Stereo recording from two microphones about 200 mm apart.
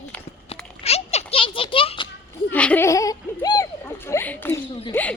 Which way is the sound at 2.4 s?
5° left (ahead or behind).